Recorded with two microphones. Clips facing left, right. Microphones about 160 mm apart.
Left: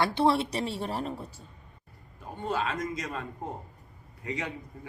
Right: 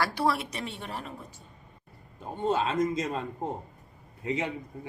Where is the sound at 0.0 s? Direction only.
25° left (ahead or behind).